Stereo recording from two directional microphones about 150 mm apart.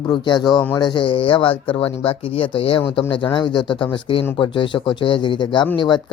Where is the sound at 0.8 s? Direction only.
30° left (ahead or behind).